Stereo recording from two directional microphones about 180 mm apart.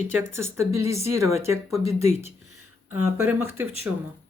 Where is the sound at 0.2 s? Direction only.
15° right (ahead or behind).